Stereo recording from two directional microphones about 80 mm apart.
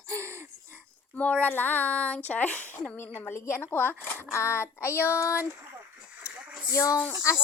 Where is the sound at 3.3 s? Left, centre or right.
Left.